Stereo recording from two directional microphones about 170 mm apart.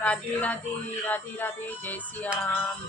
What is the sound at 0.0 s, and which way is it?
Speech, 10° left (ahead or behind).